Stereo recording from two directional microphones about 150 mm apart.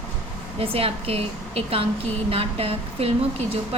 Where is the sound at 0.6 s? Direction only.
40° right (ahead or behind).